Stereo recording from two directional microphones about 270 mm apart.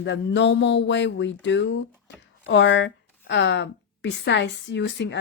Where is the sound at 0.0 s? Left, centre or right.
Left.